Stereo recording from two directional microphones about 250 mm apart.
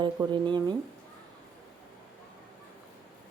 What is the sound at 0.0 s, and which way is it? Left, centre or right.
Speech, centre.